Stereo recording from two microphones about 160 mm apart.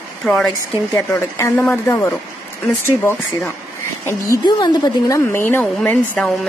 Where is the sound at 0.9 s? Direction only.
20° left (ahead or behind).